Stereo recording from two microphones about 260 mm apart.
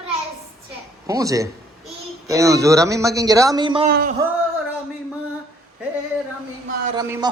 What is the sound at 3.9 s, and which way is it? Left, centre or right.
Speech, right.